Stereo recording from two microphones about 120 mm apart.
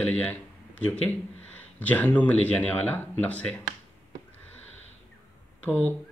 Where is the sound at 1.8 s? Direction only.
15° left (ahead or behind).